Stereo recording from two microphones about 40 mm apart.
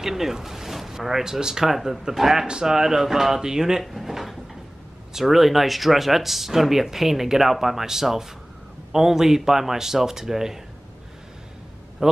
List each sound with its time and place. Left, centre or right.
0.0 s speech: centre
3.8 s drawer open or close: centre
5.2 s speech: centre
12.0 s speech: centre